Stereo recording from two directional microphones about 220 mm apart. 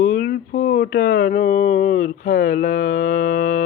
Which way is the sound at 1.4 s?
35° left (ahead or behind).